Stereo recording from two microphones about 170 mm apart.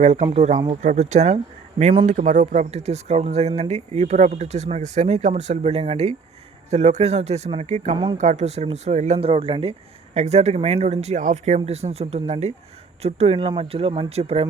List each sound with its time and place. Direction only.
0.0 s speech: 40° right (ahead or behind)